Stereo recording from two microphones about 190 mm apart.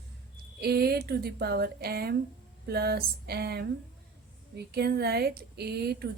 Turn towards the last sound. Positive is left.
turn(degrees=-55)  # may be behind; listen again after turning